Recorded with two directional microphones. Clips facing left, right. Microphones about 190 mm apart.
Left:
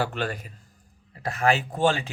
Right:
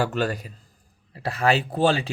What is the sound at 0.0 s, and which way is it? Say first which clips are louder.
Speech: right 4 dB; 40° right (ahead or behind).